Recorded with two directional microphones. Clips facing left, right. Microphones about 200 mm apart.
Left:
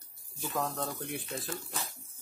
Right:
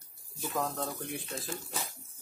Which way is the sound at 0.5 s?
Centre (ahead or behind).